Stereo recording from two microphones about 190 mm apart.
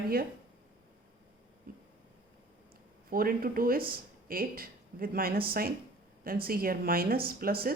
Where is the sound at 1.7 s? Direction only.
50° right (ahead or behind).